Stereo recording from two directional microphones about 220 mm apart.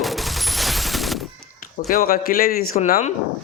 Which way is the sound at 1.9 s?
40° left (ahead or behind).